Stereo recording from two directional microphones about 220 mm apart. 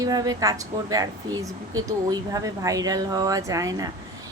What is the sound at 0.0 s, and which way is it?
A woman's voice, 15° right (ahead or behind).